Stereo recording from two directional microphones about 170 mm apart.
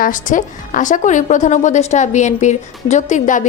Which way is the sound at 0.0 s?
50° left (ahead or behind).